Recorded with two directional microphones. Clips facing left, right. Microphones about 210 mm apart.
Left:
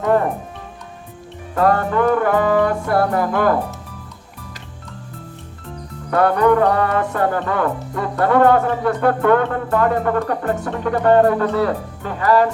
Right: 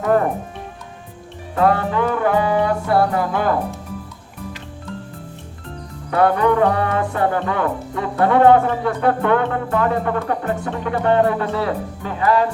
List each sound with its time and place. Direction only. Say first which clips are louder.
1.5 s music: left 1 dB; 45° left (ahead or behind)
6.1 s speech: left 1 dB; 45° left (ahead or behind)